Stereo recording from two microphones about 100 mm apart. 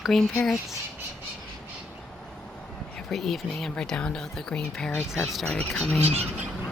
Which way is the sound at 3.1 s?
Centre (ahead or behind).